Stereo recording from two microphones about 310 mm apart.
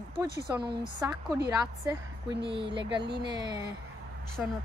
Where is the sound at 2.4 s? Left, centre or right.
Centre.